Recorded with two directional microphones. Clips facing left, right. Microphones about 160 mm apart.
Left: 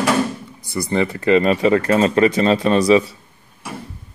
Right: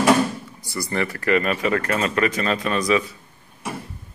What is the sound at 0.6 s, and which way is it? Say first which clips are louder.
Speech: left 6 dB; 20° left (ahead or behind).